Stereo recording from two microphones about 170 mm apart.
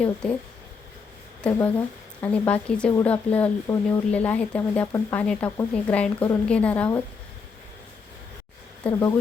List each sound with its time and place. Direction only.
0.2 s speech: 5° left (ahead or behind)
8.9 s speech: 20° left (ahead or behind)